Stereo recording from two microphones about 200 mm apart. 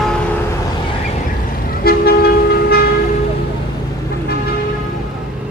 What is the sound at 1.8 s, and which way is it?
Toot, 50° left (ahead or behind).